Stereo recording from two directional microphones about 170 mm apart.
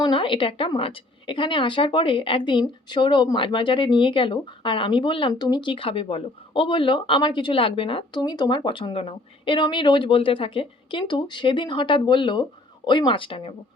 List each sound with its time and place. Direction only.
0.0 s speech: 30° left (ahead or behind)